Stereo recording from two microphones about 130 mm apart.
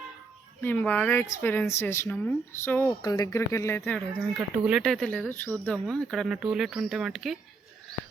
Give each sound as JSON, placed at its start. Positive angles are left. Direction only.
{"t": 0.6, "sound": "speech", "side_deg": 15}
{"t": 3.0, "sound": "speech", "side_deg": 30}
{"t": 3.8, "sound": "speech", "side_deg": 5}